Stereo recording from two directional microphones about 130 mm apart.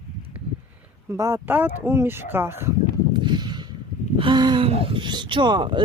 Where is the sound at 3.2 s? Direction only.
35° right (ahead or behind).